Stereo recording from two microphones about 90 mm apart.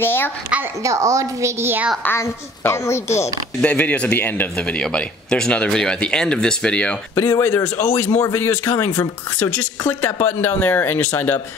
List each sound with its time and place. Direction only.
0.0 s a woman's voice: 25° left (ahead or behind)
0.5 s speech: 10° right (ahead or behind)
0.8 s a woman's voice: 35° right (ahead or behind)
2.0 s a woman's voice: 30° left (ahead or behind)
3.6 s speech: 15° left (ahead or behind)
7.2 s a woman's voice: 30° left (ahead or behind)